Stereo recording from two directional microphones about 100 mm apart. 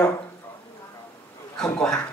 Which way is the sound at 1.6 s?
5° left (ahead or behind).